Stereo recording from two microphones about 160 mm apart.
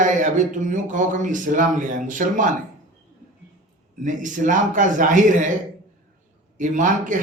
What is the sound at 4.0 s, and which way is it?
A man's voice, 50° right (ahead or behind).